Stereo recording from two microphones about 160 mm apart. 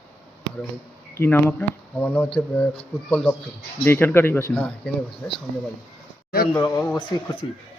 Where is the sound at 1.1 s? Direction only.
15° left (ahead or behind).